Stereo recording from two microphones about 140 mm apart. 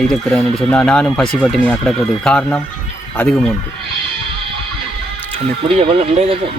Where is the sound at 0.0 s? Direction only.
5° left (ahead or behind).